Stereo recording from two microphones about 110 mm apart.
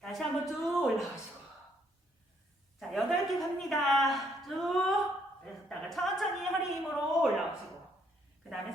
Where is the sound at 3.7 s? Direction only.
Centre (ahead or behind).